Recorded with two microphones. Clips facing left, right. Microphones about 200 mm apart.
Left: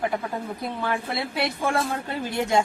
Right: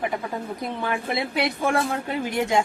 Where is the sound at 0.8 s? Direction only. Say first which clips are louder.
Right 2 dB; 20° right (ahead or behind).